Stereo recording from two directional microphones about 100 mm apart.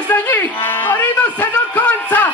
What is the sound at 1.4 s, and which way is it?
Music, 15° left (ahead or behind).